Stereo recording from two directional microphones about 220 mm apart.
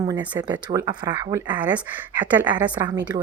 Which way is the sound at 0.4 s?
15° right (ahead or behind).